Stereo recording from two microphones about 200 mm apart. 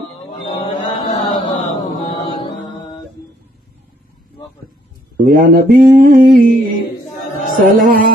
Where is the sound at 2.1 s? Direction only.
20° left (ahead or behind).